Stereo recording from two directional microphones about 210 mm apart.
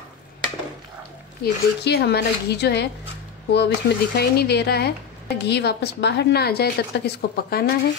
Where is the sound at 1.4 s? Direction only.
50° left (ahead or behind).